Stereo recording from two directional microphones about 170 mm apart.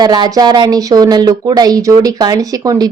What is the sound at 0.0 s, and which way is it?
Speech, 25° right (ahead or behind).